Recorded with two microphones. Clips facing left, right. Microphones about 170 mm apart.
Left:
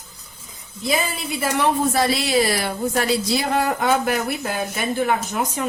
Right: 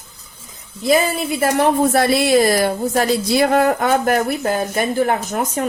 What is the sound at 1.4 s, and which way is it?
Speech, 55° right (ahead or behind).